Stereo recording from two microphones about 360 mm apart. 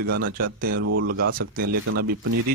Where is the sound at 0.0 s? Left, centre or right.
Right.